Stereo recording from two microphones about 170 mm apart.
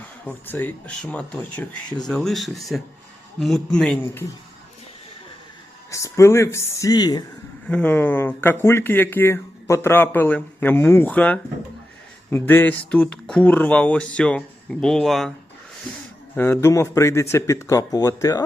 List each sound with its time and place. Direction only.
0.3 s speech: 10° left (ahead or behind)
5.9 s speech: 20° left (ahead or behind)
7.7 s speech: 10° left (ahead or behind)
16.3 s speech: 10° left (ahead or behind)